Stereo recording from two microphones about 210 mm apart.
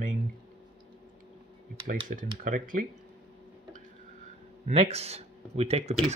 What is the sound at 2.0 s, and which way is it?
Speech, 40° right (ahead or behind).